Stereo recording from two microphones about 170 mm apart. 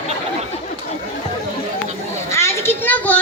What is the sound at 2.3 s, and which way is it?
Children playing, 15° left (ahead or behind).